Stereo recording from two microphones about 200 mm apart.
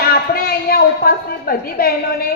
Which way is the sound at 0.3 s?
50° left (ahead or behind).